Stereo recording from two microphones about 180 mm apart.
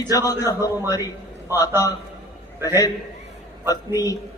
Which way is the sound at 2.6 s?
20° left (ahead or behind).